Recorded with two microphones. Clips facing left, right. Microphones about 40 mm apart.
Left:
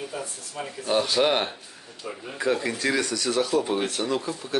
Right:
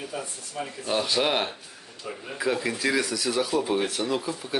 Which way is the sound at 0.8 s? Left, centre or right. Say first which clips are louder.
Left 3 dB; centre.